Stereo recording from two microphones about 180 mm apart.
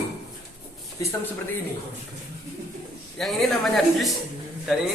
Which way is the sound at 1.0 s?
20° left (ahead or behind).